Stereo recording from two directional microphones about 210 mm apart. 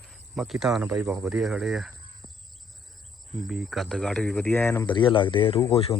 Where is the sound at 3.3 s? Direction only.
Centre (ahead or behind).